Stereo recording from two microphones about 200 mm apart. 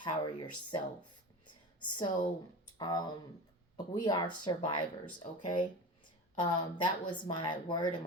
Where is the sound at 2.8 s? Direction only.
20° left (ahead or behind).